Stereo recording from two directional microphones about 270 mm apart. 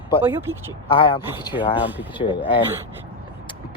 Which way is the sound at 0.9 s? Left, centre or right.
Centre.